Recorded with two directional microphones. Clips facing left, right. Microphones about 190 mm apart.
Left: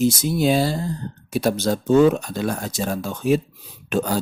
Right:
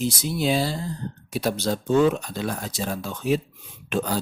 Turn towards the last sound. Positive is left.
turn(degrees=45)  # may be behind; listen again after turning